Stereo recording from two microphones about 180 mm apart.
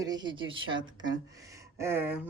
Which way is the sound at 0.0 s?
20° right (ahead or behind).